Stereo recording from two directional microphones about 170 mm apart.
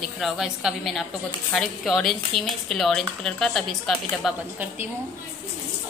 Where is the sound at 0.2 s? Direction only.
Centre (ahead or behind).